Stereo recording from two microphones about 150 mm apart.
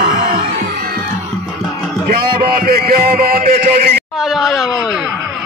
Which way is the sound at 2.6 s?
90° right.